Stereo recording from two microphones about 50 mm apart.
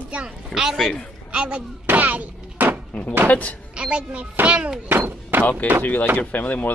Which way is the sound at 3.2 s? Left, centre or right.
Left.